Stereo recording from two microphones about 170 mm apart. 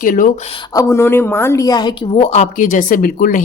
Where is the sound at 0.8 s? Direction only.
15° left (ahead or behind).